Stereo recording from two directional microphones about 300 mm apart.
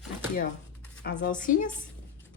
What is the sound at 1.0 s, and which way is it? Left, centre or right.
Speech, left.